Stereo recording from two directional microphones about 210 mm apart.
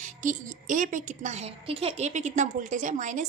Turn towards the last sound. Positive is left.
turn(degrees=-35)  # may be behind; listen again after turning